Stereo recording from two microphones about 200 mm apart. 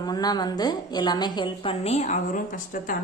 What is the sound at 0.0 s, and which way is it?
A woman's voice, 20° left (ahead or behind).